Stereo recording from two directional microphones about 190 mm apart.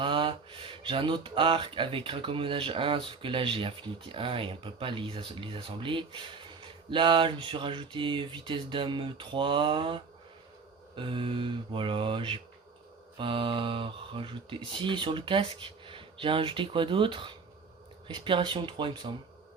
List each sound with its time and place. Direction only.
0.0 s speech: 25° right (ahead or behind)